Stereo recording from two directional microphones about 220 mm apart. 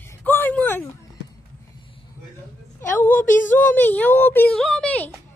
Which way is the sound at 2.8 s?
10° left (ahead or behind).